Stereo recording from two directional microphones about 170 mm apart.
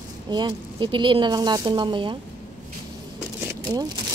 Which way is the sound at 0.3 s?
25° right (ahead or behind).